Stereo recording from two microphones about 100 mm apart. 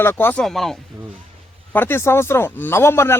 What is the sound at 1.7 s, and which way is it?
A man's voice, 20° left (ahead or behind).